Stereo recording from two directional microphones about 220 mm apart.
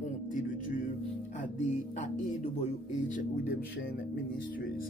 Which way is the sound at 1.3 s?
35° left (ahead or behind).